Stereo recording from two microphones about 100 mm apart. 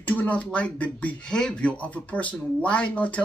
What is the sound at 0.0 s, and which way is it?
Speech, 15° left (ahead or behind).